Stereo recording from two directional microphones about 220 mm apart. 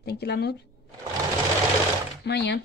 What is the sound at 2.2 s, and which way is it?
Speech, 50° left (ahead or behind).